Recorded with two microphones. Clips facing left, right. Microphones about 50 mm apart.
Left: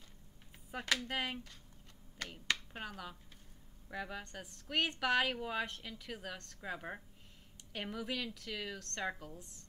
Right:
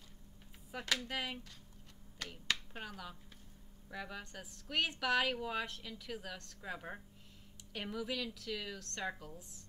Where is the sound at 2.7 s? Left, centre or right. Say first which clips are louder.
Left 1 dB; centre.